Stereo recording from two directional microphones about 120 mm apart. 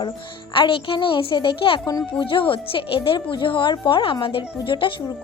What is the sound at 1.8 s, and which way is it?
Speech, 30° left (ahead or behind).